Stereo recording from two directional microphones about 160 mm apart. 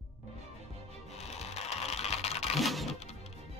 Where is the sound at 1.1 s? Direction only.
40° left (ahead or behind).